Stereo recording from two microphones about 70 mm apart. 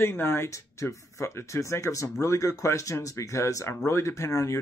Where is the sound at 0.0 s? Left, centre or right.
Left.